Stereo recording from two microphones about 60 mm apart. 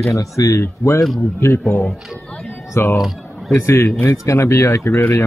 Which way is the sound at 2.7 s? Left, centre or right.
Left.